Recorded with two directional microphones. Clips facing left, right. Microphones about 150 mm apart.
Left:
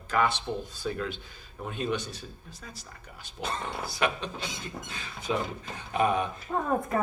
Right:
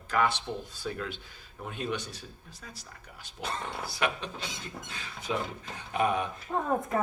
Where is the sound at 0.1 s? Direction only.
25° left (ahead or behind).